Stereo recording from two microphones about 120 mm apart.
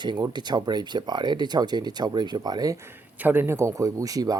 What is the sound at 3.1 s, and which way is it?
A man's voice, 15° right (ahead or behind).